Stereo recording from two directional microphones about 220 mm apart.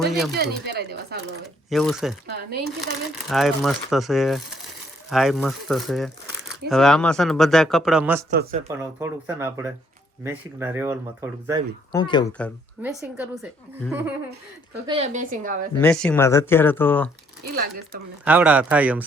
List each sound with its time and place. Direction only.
0.0 s speech: centre (ahead or behind)
0.6 s a sound: 45° right (ahead or behind)
1.7 s speech: centre (ahead or behind)
2.2 s speech: 45° right (ahead or behind)
3.2 s speech: centre (ahead or behind)
8.3 s a woman's voice: 40° right (ahead or behind)
8.6 s speech: 10° right (ahead or behind)
11.9 s speech: 20° left (ahead or behind)
12.8 s speech: 5° right (ahead or behind)
14.8 s a woman's voice: 30° right (ahead or behind)
15.8 s speech: 5° left (ahead or behind)
17.4 s speech: 45° right (ahead or behind)
18.3 s speech: 5° right (ahead or behind)